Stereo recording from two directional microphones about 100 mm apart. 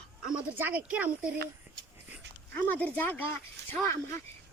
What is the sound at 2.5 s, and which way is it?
Speech, 15° left (ahead or behind).